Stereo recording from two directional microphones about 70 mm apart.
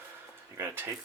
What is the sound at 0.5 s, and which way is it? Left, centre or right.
Speech, right.